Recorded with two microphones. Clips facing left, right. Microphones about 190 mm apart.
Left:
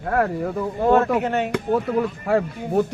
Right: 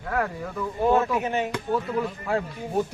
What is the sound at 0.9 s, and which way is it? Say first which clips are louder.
A man's voice: left 4 dB; 60° left (ahead or behind).